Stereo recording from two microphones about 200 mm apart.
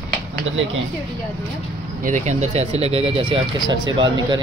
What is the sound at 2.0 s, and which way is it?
Speech, 35° right (ahead or behind).